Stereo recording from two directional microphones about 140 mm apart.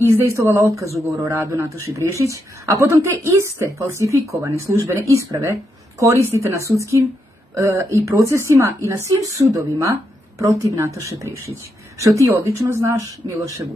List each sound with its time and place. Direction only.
0.0 s speech: 20° right (ahead or behind)